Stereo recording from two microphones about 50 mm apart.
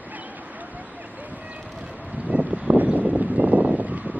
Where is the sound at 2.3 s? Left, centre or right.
Right.